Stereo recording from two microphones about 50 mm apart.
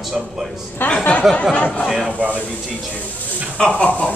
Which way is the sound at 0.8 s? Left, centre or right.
Left.